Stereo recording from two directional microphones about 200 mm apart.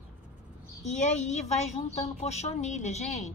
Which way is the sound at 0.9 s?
35° left (ahead or behind).